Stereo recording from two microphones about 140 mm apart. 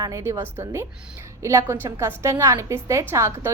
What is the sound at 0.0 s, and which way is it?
A woman's voice, 20° right (ahead or behind).